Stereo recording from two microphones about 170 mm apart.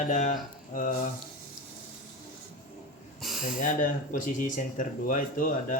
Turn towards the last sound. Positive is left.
turn(degrees=55)  # may be behind; listen again after turning